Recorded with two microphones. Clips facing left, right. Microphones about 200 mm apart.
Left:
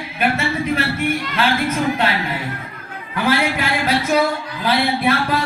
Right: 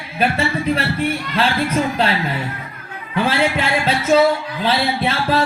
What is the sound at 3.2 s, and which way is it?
Speech, 30° right (ahead or behind).